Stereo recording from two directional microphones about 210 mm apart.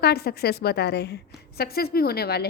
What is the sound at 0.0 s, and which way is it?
A woman's voice, 50° left (ahead or behind).